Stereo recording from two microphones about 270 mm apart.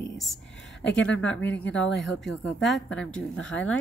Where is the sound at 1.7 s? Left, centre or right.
Left.